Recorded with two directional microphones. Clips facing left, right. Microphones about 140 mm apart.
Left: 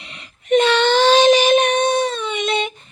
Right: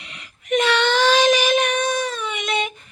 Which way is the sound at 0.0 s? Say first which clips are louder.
Left 2 dB; 30° left (ahead or behind).